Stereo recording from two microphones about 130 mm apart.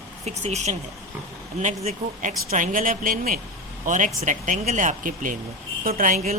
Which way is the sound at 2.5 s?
90° right.